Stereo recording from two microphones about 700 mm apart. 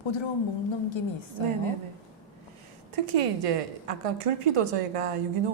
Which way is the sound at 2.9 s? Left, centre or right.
Right.